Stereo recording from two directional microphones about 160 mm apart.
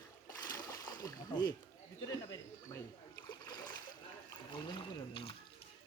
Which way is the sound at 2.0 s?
20° left (ahead or behind).